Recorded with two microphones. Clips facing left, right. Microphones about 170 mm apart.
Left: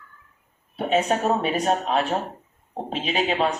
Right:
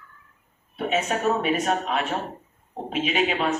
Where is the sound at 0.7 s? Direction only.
35° left (ahead or behind).